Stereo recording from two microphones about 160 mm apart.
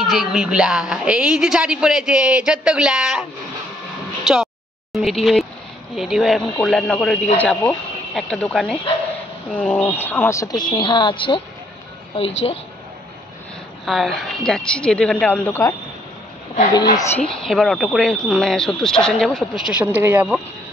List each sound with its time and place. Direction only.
0.0 s a woman's voice: centre (ahead or behind); by 12.5 s 40° left (ahead or behind)
13.8 s a woman's voice: centre (ahead or behind)
17.2 s a woman's voice: centre (ahead or behind)